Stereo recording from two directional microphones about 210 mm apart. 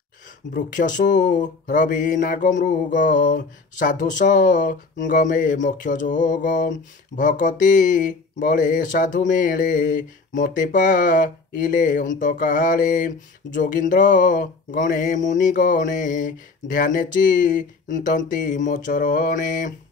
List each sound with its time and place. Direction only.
0.5 s speech: 40° left (ahead or behind)